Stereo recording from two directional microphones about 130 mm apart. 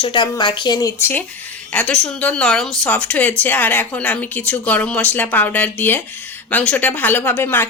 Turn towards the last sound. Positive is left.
turn(degrees=15)  # may be behind; listen again after turning